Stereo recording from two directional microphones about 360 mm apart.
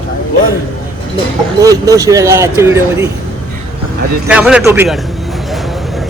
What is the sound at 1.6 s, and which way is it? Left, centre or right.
Speech, centre.